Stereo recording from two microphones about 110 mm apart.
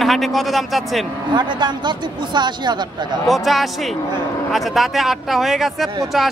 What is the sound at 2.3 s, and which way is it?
Speech, 45° right (ahead or behind).